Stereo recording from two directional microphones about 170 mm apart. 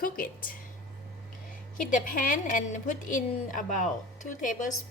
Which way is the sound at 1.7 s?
50° left (ahead or behind).